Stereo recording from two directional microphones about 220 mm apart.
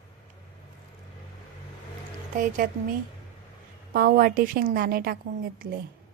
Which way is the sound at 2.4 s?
40° right (ahead or behind).